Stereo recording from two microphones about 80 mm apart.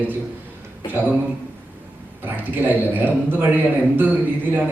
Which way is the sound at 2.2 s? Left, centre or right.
Right.